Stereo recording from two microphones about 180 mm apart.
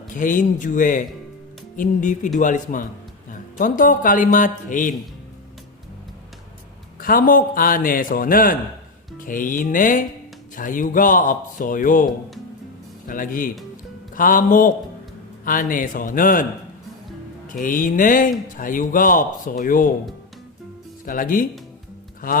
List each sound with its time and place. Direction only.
0.1 s speech: 45° left (ahead or behind)
7.0 s speech: 50° left (ahead or behind)
13.1 s speech: 50° left (ahead or behind)
17.5 s speech: 50° left (ahead or behind)
21.0 s speech: 50° left (ahead or behind)